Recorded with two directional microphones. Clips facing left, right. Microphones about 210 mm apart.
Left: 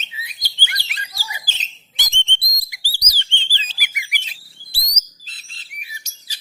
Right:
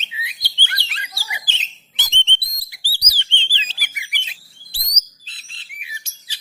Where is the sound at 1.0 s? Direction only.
40° left (ahead or behind).